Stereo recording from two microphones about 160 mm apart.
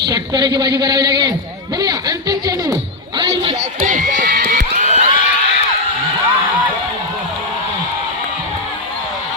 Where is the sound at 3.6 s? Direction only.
50° right (ahead or behind).